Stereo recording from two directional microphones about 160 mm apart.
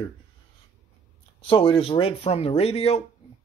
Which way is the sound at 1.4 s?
35° left (ahead or behind).